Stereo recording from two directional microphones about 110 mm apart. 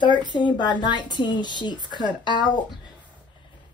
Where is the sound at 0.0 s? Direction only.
45° left (ahead or behind).